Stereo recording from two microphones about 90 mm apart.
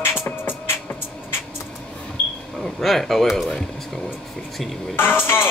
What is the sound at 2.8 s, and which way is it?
Speech, 5° left (ahead or behind).